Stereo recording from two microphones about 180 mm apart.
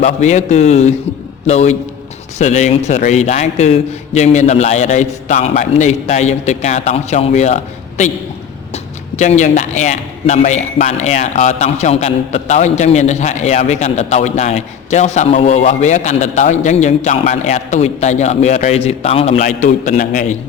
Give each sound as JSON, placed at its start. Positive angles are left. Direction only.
{"t": 0.0, "sound": "a man's voice", "side_deg": 40}